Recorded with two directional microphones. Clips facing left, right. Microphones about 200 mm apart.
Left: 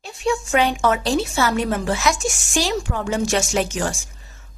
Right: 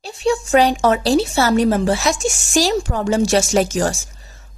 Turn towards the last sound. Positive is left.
turn(degrees=-40)  # may be behind; listen again after turning